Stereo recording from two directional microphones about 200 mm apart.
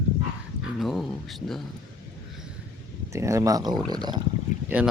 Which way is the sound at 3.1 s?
15° right (ahead or behind).